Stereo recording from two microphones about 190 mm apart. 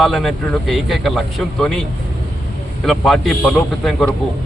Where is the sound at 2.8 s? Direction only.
Centre (ahead or behind).